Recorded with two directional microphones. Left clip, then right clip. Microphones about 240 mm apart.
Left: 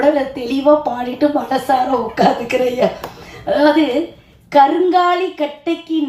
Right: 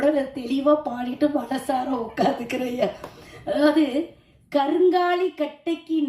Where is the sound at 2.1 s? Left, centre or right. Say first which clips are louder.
Left 9 dB; right.